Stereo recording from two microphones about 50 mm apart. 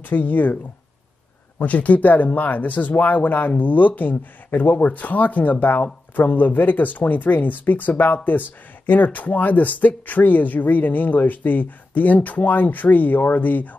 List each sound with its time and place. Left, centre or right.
0.0 s speech: left
1.6 s speech: left